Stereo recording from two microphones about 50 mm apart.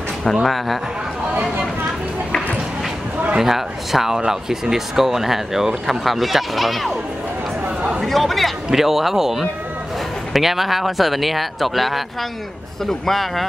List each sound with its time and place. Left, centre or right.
0.2 s speech: centre
3.3 s speech: centre
8.0 s speech: centre